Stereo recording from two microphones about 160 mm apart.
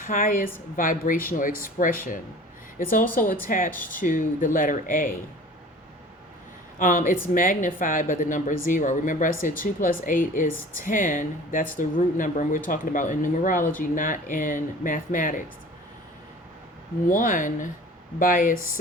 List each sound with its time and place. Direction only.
0.0 s speech: 60° left (ahead or behind)
6.7 s speech: 55° left (ahead or behind)
17.1 s speech: 55° left (ahead or behind)